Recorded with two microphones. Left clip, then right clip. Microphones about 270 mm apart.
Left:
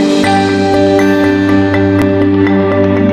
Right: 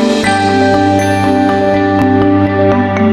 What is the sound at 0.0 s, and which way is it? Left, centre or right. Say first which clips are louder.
Music: left 1 dB; centre.